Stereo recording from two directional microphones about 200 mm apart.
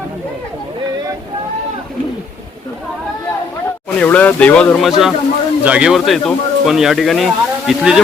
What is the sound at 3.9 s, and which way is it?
Speech, 5° left (ahead or behind).